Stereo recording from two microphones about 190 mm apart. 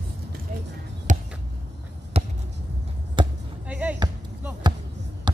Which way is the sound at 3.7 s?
5° right (ahead or behind).